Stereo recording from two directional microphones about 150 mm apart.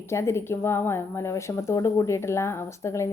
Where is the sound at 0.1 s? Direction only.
15° left (ahead or behind).